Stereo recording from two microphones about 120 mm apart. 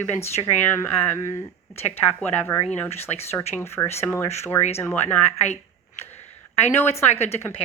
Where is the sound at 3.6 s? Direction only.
20° left (ahead or behind).